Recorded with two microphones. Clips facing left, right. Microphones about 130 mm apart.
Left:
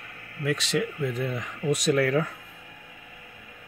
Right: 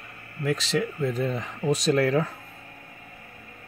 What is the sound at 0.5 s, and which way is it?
Speech, 30° right (ahead or behind).